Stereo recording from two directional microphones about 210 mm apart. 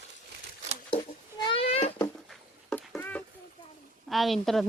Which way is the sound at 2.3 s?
Centre (ahead or behind).